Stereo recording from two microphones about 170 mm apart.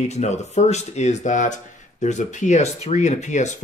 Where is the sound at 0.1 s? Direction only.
40° left (ahead or behind).